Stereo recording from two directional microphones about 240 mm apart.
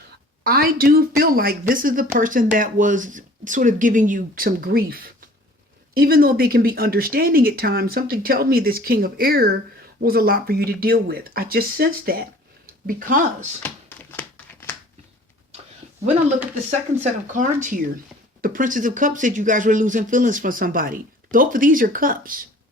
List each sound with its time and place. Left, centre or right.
0.4 s speech: right
14.2 s crumpling: centre
17.3 s speech: right